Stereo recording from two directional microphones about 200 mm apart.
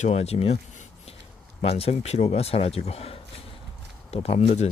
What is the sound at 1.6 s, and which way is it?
Speech, 30° left (ahead or behind).